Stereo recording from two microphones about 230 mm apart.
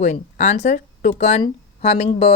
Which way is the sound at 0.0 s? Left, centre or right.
Left.